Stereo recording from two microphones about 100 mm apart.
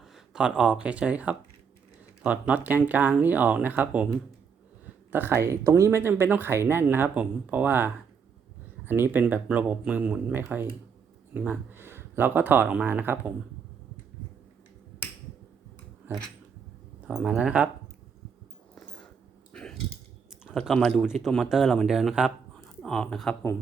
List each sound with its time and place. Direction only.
0.0 s speech: 10° right (ahead or behind)
5.1 s speech: 20° right (ahead or behind)
17.0 s speech: 5° right (ahead or behind)
19.5 s a sound: 10° left (ahead or behind)
20.6 s a man's voice: 5° left (ahead or behind)